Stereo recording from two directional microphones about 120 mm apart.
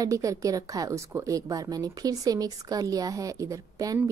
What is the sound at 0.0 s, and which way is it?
A woman's voice, 30° right (ahead or behind).